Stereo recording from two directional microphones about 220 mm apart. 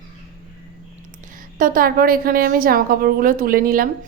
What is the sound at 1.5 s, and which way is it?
A woman's voice, 40° right (ahead or behind).